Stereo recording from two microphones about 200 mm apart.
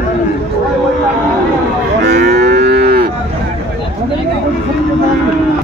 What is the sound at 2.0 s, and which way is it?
Moo, 60° right (ahead or behind).